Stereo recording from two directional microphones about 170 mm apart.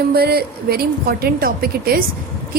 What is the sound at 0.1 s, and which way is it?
A woman's voice, 65° right (ahead or behind).